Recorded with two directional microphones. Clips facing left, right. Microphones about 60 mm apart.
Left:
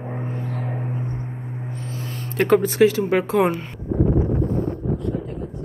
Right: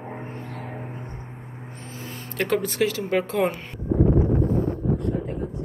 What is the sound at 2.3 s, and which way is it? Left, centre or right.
Speech, left.